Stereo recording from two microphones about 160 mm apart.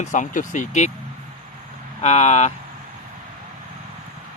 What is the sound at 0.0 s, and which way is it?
Speech, 50° left (ahead or behind).